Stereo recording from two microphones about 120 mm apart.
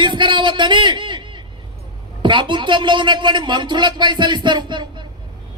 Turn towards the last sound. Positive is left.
turn(degrees=-40)  # may be behind; listen again after turning